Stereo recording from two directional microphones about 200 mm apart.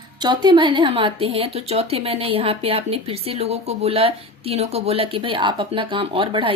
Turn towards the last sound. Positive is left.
turn(degrees=-25)  # may be behind; listen again after turning